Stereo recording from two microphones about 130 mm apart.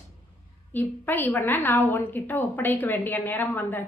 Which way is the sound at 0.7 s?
15° left (ahead or behind).